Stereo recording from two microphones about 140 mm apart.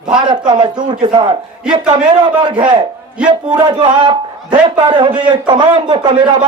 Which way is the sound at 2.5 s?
35° right (ahead or behind).